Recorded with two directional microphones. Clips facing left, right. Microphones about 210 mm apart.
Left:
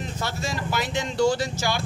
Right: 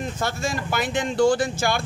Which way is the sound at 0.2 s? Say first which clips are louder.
Right 2 dB; 50° right (ahead or behind).